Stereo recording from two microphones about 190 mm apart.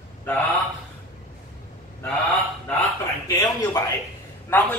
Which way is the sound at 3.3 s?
15° left (ahead or behind).